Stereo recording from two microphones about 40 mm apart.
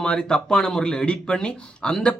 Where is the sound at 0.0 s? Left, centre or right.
Left.